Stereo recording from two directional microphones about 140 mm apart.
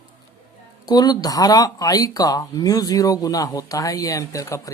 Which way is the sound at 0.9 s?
30° left (ahead or behind).